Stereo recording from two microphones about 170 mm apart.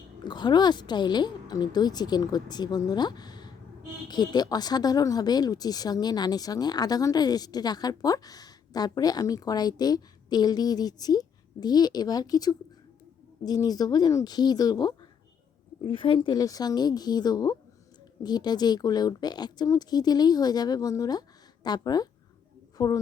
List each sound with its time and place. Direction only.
0.3 s speech: 25° left (ahead or behind)